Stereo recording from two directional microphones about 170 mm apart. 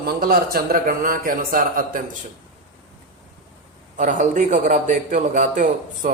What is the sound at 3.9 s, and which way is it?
A man's voice, 50° right (ahead or behind).